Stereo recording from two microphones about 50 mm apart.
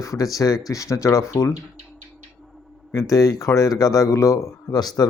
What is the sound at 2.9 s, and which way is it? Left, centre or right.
A man's voice, left.